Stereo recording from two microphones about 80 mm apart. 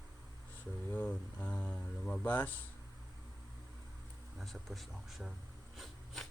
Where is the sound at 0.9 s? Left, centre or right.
Centre.